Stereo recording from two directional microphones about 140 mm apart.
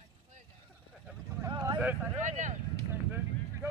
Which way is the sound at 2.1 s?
60° right (ahead or behind).